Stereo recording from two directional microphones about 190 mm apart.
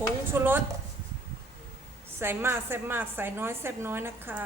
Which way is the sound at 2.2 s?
10° right (ahead or behind).